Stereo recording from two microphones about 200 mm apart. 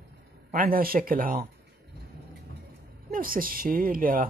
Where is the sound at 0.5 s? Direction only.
45° right (ahead or behind).